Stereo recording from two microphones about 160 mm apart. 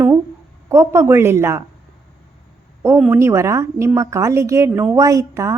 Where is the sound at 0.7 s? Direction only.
15° right (ahead or behind).